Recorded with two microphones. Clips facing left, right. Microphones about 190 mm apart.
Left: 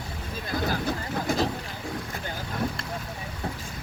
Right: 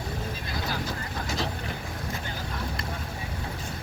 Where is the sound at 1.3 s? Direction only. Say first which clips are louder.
Left 6 dB; 55° left (ahead or behind).